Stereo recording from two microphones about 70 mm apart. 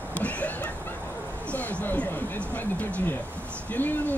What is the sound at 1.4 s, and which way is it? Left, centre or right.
Speech, left.